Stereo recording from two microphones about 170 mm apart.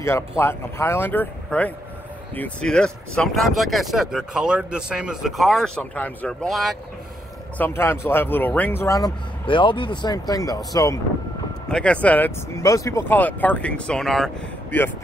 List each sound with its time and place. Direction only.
0.4 s speech: 15° left (ahead or behind)
7.5 s speech: 10° left (ahead or behind)
11.7 s speech: 5° left (ahead or behind)